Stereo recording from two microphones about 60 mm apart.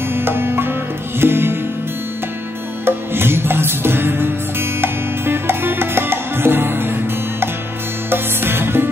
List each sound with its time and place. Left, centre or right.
0.1 s music: right
2.8 s music: right
8.1 s music: right